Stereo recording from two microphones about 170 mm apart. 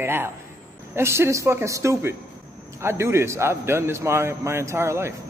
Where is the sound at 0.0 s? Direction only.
15° right (ahead or behind).